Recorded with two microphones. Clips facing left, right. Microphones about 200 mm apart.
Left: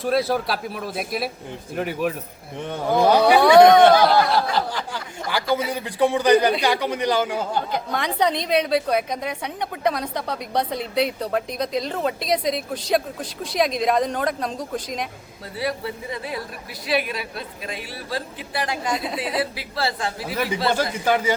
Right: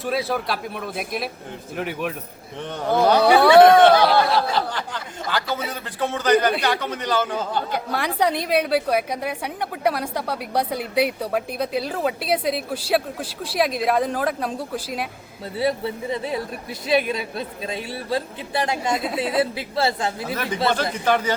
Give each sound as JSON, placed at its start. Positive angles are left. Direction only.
{"t": 0.0, "sound": "a man's voice", "side_deg": 0}
{"t": 3.4, "sound": "speech", "side_deg": -5}
{"t": 4.0, "sound": "snicker", "side_deg": 0}
{"t": 4.4, "sound": "a man's voice", "side_deg": 10}
{"t": 7.7, "sound": "a woman's voice", "side_deg": -10}
{"t": 15.5, "sound": "a woman's voice", "side_deg": -25}
{"t": 18.9, "sound": "speech", "side_deg": 0}
{"t": 19.4, "sound": "a woman's voice", "side_deg": -25}
{"t": 20.7, "sound": "a man's voice", "side_deg": 10}